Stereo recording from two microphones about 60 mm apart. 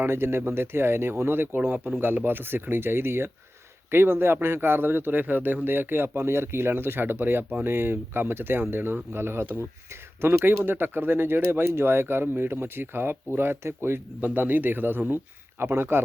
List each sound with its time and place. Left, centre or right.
0.0 s speech: right
14.3 s speech: right